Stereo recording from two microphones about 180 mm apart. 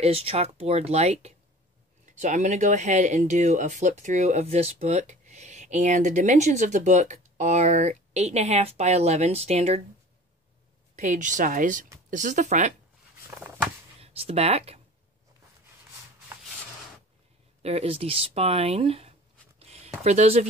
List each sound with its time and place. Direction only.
0.0 s speech: 35° right (ahead or behind)
11.0 s speech: 45° right (ahead or behind)
14.0 s speech: 35° right (ahead or behind)
17.6 s speech: 35° right (ahead or behind)
19.6 s a sound: 35° right (ahead or behind)